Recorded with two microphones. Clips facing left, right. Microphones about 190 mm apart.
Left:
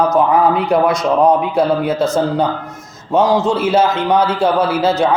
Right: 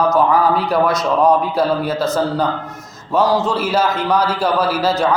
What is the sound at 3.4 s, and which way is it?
A man's voice, 25° left (ahead or behind).